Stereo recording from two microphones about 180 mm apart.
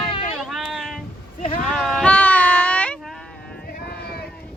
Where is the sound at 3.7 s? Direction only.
60° left (ahead or behind).